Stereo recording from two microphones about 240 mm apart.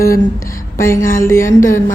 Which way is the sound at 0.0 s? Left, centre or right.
Centre.